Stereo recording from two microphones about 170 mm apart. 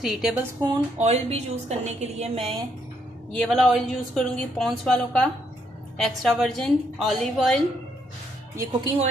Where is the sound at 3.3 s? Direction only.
5° left (ahead or behind).